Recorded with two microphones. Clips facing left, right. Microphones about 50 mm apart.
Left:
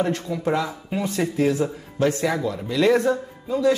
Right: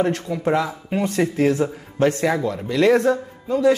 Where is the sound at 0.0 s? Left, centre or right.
Right.